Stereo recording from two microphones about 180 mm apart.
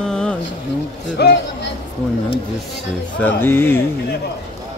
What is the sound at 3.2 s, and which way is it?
Speech, 10° left (ahead or behind).